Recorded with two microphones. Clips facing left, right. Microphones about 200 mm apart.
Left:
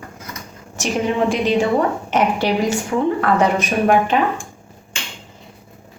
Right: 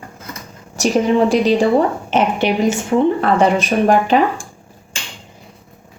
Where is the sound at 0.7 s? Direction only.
35° right (ahead or behind).